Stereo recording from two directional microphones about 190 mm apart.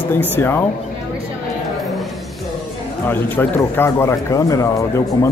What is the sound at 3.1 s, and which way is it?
Speech, 10° left (ahead or behind).